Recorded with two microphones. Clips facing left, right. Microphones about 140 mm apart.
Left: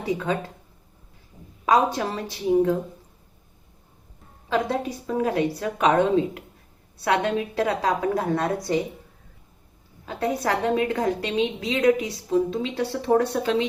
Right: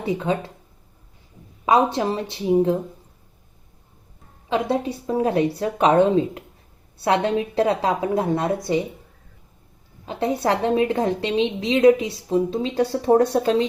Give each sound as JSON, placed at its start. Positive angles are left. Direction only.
{"t": 0.0, "sound": "a woman's voice", "side_deg": -25}
{"t": 1.6, "sound": "a woman's voice", "side_deg": -25}
{"t": 4.4, "sound": "a woman's voice", "side_deg": -20}
{"t": 10.1, "sound": "a woman's voice", "side_deg": -25}